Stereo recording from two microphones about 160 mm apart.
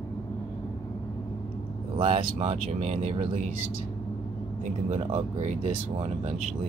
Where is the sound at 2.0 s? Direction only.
40° right (ahead or behind).